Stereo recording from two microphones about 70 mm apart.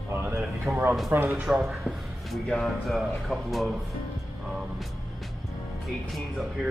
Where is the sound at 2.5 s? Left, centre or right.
Centre.